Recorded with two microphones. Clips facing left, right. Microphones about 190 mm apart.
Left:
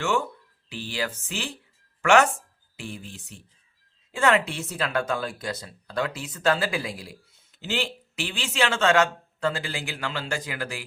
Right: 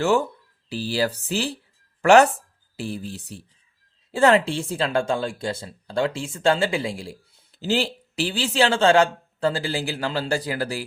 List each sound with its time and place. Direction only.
0.0 s speech: 35° right (ahead or behind)